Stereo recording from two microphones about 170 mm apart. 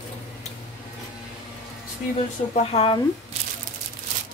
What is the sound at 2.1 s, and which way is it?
Speech, 35° left (ahead or behind).